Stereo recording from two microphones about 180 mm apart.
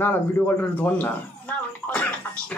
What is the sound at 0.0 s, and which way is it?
Speech, 10° left (ahead or behind).